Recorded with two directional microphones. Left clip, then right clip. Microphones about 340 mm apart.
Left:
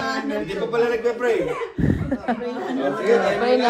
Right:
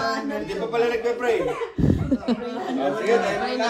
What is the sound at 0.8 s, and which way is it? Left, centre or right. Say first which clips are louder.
Speech: left 2 dB; centre.